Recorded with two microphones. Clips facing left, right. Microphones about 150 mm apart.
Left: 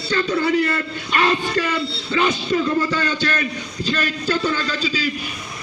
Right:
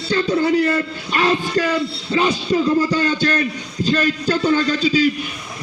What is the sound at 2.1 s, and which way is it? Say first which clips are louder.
A man's voice: right 1 dB; 30° right (ahead or behind).